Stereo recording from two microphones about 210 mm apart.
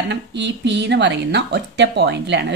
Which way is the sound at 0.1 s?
55° right (ahead or behind).